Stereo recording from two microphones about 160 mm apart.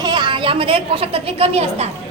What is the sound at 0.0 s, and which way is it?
A woman's voice, 30° right (ahead or behind).